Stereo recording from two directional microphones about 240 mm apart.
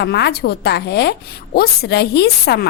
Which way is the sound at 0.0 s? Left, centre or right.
Left.